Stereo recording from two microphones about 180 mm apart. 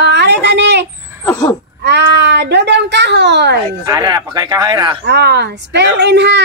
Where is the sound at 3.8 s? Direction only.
20° right (ahead or behind).